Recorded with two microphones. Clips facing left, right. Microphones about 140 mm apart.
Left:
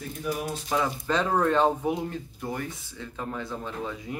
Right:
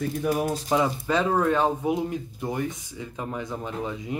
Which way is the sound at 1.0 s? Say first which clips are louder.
Right 2 dB; 10° right (ahead or behind).